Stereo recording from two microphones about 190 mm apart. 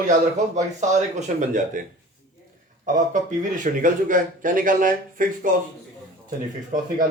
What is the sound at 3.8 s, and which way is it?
A man's voice, 45° right (ahead or behind).